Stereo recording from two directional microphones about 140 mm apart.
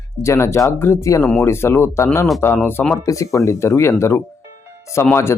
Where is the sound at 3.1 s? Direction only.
20° left (ahead or behind).